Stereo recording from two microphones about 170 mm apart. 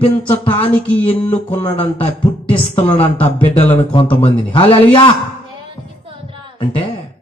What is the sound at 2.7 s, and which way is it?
A man's voice, 35° left (ahead or behind).